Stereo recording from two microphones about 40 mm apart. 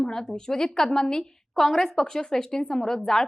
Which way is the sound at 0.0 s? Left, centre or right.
Centre.